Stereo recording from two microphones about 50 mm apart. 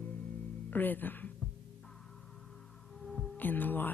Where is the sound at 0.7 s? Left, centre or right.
Left.